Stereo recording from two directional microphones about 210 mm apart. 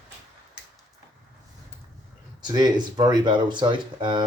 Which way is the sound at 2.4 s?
20° right (ahead or behind).